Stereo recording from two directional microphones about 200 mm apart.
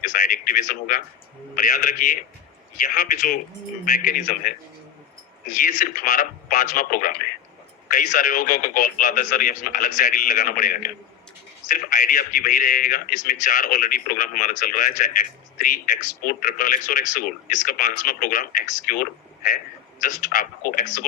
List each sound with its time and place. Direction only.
0.0 s a man's voice: 40° left (ahead or behind)
5.5 s a man's voice: 40° left (ahead or behind)